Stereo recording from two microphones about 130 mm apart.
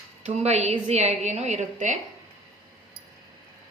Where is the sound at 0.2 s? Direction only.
60° right (ahead or behind).